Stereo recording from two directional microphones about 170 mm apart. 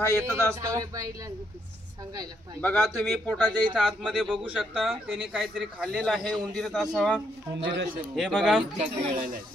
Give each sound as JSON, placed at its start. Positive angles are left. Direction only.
{"t": 0.0, "sound": "a man's voice", "side_deg": -15}
{"t": 2.6, "sound": "speech", "side_deg": 5}
{"t": 7.6, "sound": "a man's voice", "side_deg": -90}
{"t": 8.2, "sound": "speech", "side_deg": 0}
{"t": 8.7, "sound": "speech", "side_deg": -50}